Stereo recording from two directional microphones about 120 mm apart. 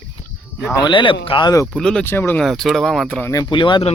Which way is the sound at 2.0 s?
20° left (ahead or behind).